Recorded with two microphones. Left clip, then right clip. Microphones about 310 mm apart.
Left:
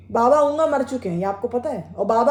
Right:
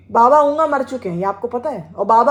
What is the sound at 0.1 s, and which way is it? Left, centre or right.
A woman's voice, centre.